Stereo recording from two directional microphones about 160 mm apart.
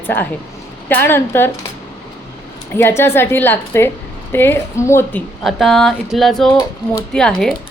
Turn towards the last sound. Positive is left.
turn(degrees=5)  # may be behind; listen again after turning